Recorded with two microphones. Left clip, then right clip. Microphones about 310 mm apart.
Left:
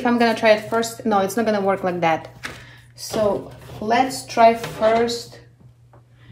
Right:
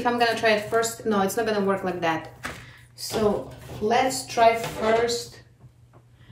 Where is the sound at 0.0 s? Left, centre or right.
Left.